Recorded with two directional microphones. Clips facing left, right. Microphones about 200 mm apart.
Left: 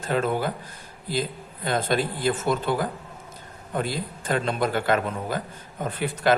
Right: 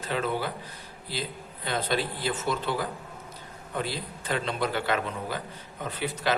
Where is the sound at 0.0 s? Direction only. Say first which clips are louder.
Left 5 dB; 50° left (ahead or behind).